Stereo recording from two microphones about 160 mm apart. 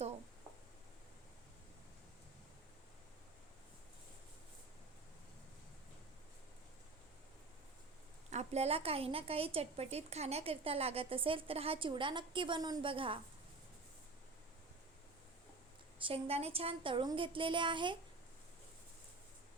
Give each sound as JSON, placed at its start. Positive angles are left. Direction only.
{"t": 8.3, "sound": "a woman's voice", "side_deg": -45}
{"t": 16.0, "sound": "a woman's voice", "side_deg": -35}